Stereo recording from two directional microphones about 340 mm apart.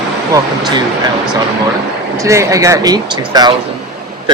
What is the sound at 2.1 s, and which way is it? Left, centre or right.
Speech, centre.